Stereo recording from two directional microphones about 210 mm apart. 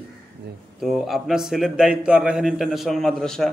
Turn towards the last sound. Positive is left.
turn(degrees=0)  # may be behind; listen again after turning